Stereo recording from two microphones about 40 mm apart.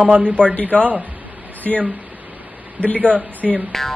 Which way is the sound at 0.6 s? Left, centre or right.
Right.